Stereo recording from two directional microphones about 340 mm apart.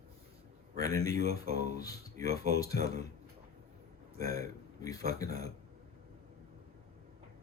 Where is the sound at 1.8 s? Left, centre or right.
Centre.